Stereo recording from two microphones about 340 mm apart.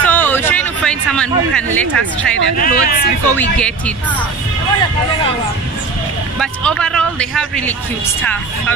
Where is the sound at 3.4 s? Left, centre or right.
Centre.